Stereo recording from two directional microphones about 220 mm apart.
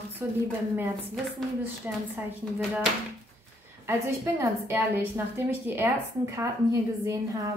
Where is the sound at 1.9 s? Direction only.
10° right (ahead or behind).